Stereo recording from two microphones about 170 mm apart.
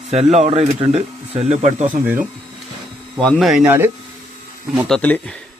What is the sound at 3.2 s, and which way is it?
Speech, centre (ahead or behind).